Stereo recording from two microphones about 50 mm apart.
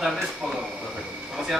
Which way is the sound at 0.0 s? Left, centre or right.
Centre.